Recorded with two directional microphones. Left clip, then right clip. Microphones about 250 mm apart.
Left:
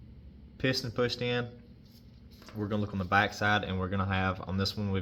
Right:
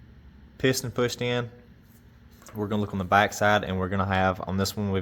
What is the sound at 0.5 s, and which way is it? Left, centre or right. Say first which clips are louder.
Speech: right 5 dB; right.